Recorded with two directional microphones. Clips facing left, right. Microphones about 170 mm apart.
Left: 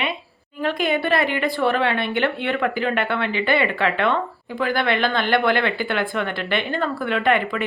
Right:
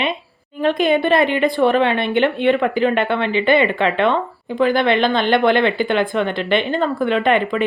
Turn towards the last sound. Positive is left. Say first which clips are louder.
# right 4 dB
turn(degrees=-20)  # may be behind; listen again after turning